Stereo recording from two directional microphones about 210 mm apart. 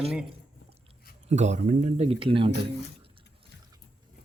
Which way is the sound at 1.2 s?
35° right (ahead or behind).